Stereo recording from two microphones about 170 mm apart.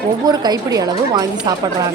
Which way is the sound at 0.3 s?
25° right (ahead or behind).